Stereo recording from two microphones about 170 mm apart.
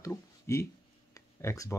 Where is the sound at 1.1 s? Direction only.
20° left (ahead or behind).